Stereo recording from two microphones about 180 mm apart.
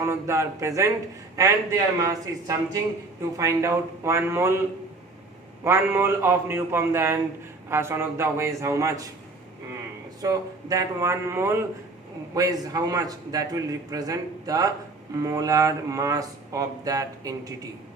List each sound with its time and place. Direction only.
0.0 s a man's voice: 15° right (ahead or behind)
5.6 s a man's voice: 15° right (ahead or behind)
10.2 s a man's voice: 20° right (ahead or behind)